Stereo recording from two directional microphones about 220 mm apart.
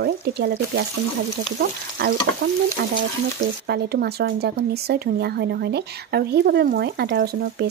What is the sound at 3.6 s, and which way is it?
Speech, 45° right (ahead or behind).